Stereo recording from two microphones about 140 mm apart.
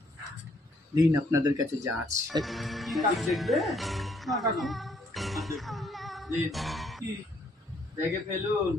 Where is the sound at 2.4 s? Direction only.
Centre (ahead or behind).